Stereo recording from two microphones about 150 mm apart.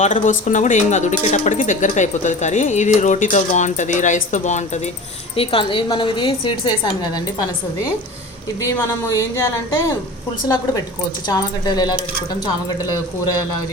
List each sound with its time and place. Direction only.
0.0 s speech: 55° left (ahead or behind)
5.4 s a woman's voice: 35° left (ahead or behind)
9.1 s speech: 20° left (ahead or behind)
11.3 s speech: 25° left (ahead or behind)